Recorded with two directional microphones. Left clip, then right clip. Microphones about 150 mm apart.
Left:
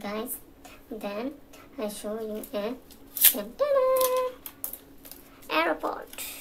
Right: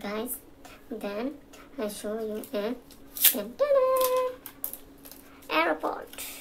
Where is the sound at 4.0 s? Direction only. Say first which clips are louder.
Even; 10° left (ahead or behind).